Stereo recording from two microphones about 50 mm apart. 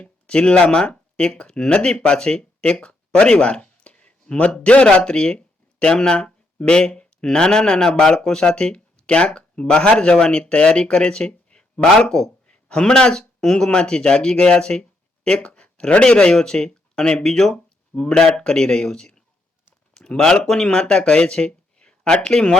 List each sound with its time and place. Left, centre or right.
0.0 s speech: left
19.9 s a sound: centre
20.5 s speech: centre